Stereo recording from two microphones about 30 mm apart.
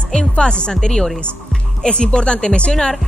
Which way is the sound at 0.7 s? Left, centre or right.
Left.